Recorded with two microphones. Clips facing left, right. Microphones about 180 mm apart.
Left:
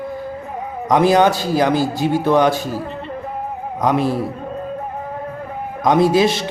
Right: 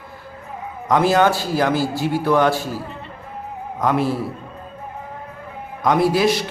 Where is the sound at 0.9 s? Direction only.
15° left (ahead or behind).